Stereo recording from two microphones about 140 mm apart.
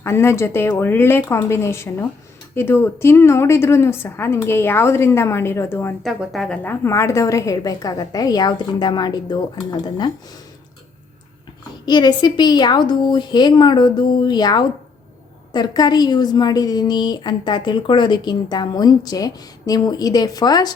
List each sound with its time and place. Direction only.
0.0 s a woman's voice: 15° left (ahead or behind)
6.0 s a woman's voice: centre (ahead or behind)
6.6 s a woman's voice: 15° left (ahead or behind)
11.9 s a woman's voice: 30° left (ahead or behind)